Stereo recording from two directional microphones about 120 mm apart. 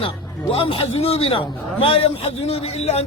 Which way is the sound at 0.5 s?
50° left (ahead or behind).